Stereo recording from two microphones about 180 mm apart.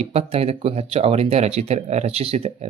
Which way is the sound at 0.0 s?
35° right (ahead or behind).